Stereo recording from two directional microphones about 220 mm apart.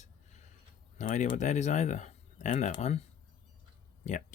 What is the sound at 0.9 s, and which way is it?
Speech, 35° left (ahead or behind).